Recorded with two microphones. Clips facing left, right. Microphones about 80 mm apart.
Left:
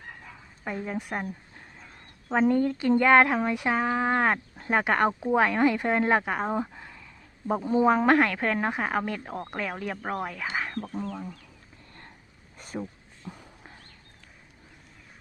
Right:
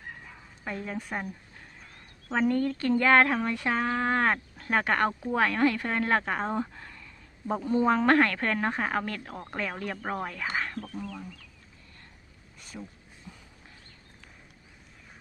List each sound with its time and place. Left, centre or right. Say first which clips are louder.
0.6 s speech: left 3 dB; centre
11.1 s speech: left 4 dB; left
12.5 s a sound: left 8 dB; left